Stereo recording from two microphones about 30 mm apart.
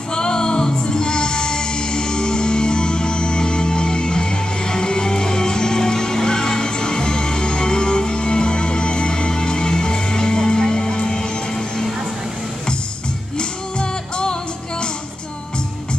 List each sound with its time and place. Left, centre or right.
0.1 s music: left
13.4 s music: left